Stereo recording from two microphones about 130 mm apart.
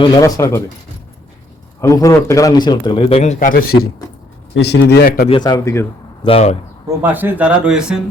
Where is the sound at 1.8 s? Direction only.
25° left (ahead or behind); by 3.5 s 65° left (ahead or behind).